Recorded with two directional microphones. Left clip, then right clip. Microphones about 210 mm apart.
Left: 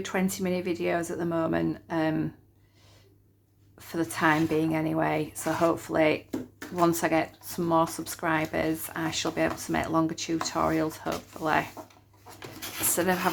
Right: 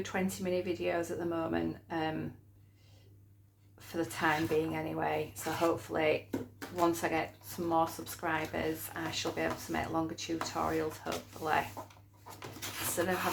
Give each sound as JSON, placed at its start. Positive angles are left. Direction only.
{"t": 0.0, "sound": "speech", "side_deg": 35}
{"t": 3.8, "sound": "speech", "side_deg": 35}
{"t": 13.0, "sound": "speech", "side_deg": 40}